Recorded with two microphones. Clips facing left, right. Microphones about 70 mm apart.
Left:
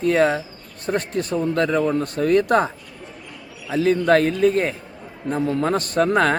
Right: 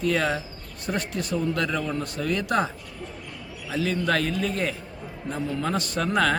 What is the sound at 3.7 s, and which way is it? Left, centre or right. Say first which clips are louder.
Speech: left 8 dB; left.